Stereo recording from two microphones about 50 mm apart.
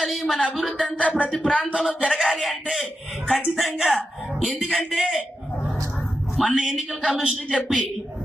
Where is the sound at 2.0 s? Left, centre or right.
Centre.